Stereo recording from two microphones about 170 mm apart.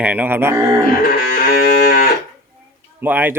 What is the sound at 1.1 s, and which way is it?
Music, 60° left (ahead or behind).